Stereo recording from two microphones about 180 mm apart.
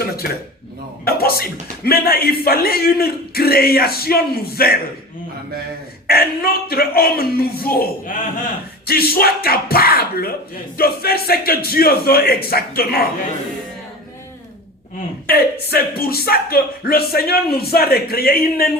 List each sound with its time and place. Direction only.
0.0 s a sound: 55° left (ahead or behind)
1.0 s speech: 55° left (ahead or behind)
6.1 s speech: 55° left (ahead or behind)
15.3 s speech: 60° left (ahead or behind)